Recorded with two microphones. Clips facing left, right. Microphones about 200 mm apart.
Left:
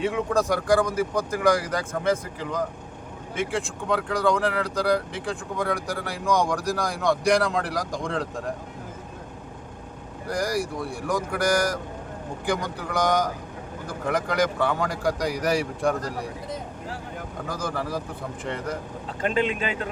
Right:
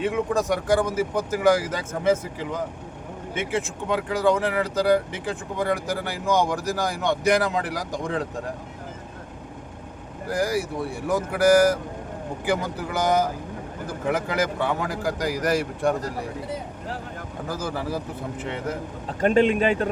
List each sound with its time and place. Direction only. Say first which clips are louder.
0.0 s speech: even; centre (ahead or behind)
10.2 s speech: right 2 dB; 5° right (ahead or behind)
17.5 s speech: right 1 dB; 5° right (ahead or behind)
19.2 s speech: right 6 dB; 45° right (ahead or behind)